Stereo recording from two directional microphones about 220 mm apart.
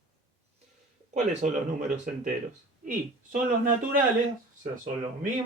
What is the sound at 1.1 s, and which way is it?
Speech, 35° right (ahead or behind).